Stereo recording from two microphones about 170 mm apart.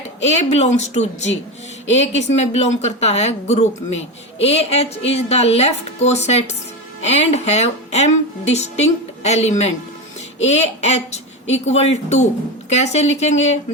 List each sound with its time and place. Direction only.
0.2 s speech: 40° left (ahead or behind)